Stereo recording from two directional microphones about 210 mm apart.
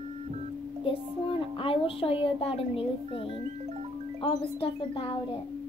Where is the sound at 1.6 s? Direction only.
25° left (ahead or behind).